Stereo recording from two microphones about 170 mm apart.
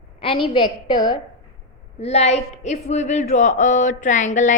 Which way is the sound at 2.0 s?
40° left (ahead or behind).